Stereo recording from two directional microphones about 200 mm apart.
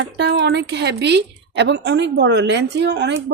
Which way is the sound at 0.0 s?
60° right (ahead or behind).